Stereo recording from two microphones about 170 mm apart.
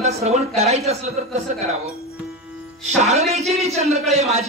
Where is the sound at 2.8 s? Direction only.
40° right (ahead or behind).